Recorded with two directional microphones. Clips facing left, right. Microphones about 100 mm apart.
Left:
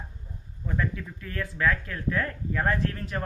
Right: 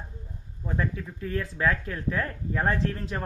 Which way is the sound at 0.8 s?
30° right (ahead or behind).